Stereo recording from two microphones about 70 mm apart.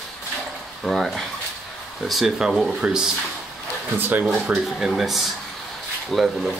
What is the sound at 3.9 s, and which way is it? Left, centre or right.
Speech, right.